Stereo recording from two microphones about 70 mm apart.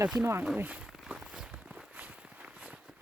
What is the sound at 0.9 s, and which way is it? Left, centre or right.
Walk, centre.